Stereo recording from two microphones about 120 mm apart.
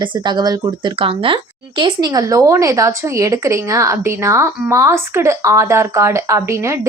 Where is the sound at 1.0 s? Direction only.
45° right (ahead or behind).